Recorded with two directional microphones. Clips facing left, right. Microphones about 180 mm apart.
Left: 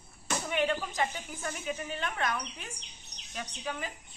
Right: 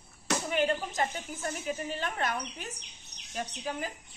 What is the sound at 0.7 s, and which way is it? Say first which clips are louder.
A woman's voice: right 1 dB; 40° right (ahead or behind).